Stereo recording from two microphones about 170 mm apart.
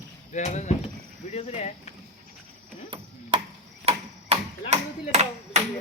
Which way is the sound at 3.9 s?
35° right (ahead or behind).